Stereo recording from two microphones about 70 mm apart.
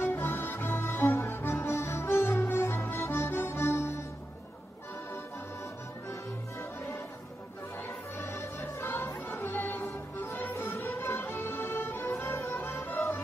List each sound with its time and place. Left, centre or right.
0.0 s music: left
7.8 s music: left